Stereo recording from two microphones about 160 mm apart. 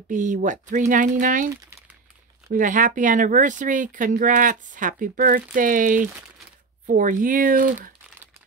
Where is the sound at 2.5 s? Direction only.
55° right (ahead or behind).